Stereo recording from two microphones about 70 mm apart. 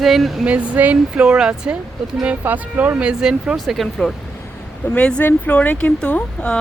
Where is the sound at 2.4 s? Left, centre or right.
Right.